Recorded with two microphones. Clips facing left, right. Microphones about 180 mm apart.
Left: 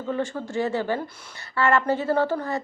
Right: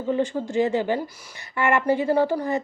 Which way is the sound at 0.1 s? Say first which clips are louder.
Right 4 dB; 20° right (ahead or behind).